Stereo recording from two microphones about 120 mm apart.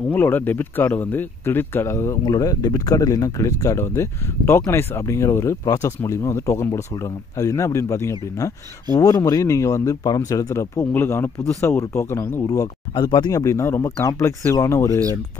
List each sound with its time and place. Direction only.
0.1 s speech: 15° left (ahead or behind)
2.2 s speech: 30° left (ahead or behind)
12.9 s speech: 40° left (ahead or behind)
13.4 s speech: 25° left (ahead or behind)